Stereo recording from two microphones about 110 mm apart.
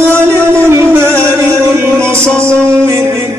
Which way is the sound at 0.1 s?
20° right (ahead or behind).